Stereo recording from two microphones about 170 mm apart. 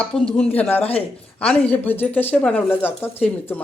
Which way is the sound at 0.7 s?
35° left (ahead or behind).